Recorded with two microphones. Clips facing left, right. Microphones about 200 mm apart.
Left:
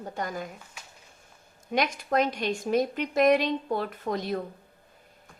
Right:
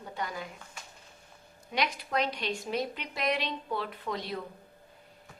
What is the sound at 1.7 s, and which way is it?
A woman's voice, 45° left (ahead or behind).